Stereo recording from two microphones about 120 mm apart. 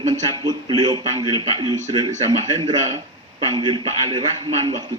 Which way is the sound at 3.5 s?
40° right (ahead or behind).